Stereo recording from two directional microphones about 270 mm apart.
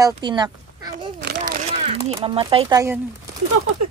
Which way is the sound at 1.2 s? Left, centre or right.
Right.